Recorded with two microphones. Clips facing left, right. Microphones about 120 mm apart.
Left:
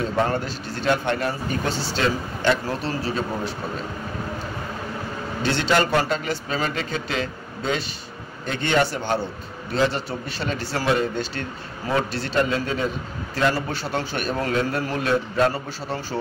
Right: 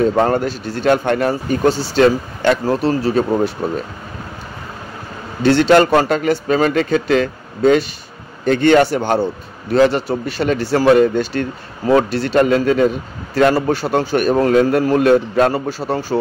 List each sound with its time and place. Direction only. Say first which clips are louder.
0.1 s speech: right 7 dB; 45° right (ahead or behind)
5.4 s a man's voice: right 10 dB; 55° right (ahead or behind)
13.6 s speech: right 10 dB; 45° right (ahead or behind)